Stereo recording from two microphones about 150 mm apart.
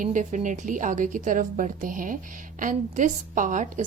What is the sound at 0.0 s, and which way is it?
A woman's voice, 60° right (ahead or behind).